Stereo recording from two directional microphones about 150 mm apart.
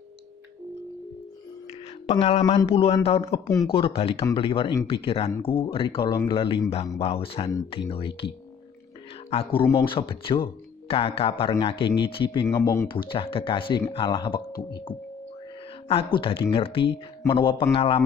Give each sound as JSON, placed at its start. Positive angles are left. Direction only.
{"t": 2.0, "sound": "speech", "side_deg": 40}
{"t": 9.3, "sound": "speech", "side_deg": 40}
{"t": 12.4, "sound": "speech", "side_deg": 20}
{"t": 12.8, "sound": "speech", "side_deg": 35}